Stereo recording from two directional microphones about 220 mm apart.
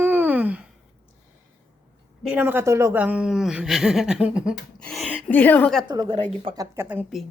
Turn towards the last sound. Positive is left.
turn(degrees=-10)  # may be behind; listen again after turning